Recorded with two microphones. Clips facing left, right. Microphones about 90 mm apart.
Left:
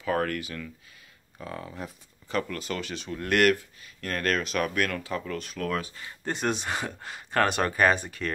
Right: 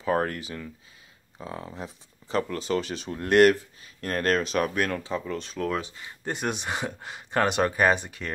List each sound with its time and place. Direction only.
0.0 s speech: 30° right (ahead or behind)